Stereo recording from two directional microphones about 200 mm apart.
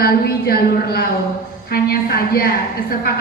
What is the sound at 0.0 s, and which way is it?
A woman's voice, 50° left (ahead or behind).